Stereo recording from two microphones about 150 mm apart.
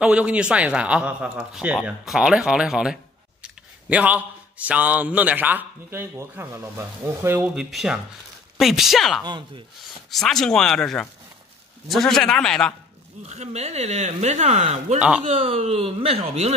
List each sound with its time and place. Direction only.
0.0 s speech: 10° right (ahead or behind)
13.3 s speech: 45° right (ahead or behind)
15.0 s speech: 10° right (ahead or behind)
15.2 s speech: 40° right (ahead or behind)